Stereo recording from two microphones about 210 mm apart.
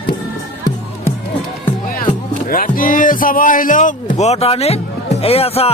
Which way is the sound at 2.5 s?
40° left (ahead or behind).